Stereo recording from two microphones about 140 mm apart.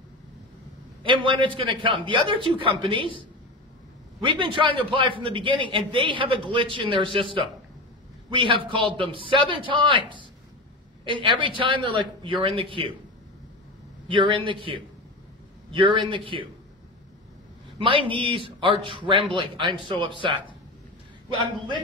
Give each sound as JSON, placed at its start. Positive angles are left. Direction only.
{"t": 1.0, "sound": "a man's voice", "side_deg": -35}
{"t": 4.2, "sound": "a man's voice", "side_deg": -35}
{"t": 8.3, "sound": "a man's voice", "side_deg": -40}
{"t": 11.1, "sound": "a man's voice", "side_deg": -35}
{"t": 14.0, "sound": "a man's voice", "side_deg": -40}
{"t": 17.7, "sound": "a man's voice", "side_deg": -40}